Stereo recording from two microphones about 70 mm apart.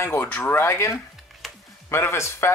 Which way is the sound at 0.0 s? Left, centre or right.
Left.